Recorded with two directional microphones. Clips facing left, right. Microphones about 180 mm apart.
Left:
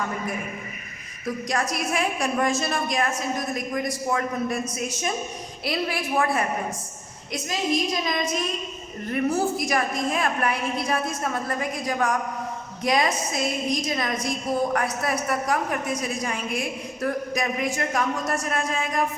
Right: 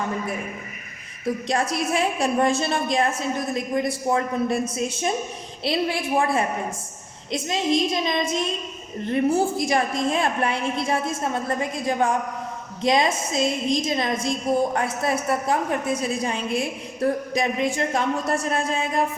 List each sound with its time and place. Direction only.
1.5 s a woman's voice: 25° right (ahead or behind)